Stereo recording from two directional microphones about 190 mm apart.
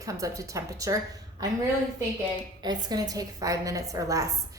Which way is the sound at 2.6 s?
20° right (ahead or behind).